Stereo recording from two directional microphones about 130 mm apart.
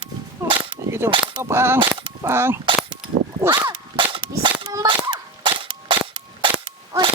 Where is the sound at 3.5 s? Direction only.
35° right (ahead or behind).